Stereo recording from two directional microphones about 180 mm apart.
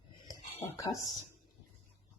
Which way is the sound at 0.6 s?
15° left (ahead or behind).